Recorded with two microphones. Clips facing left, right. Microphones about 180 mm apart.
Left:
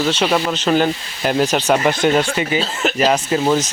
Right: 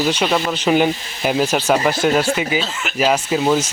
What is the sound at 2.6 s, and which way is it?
Speech, 40° left (ahead or behind).